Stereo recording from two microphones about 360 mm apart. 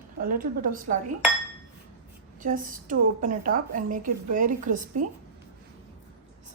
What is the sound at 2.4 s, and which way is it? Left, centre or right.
A woman's voice, right.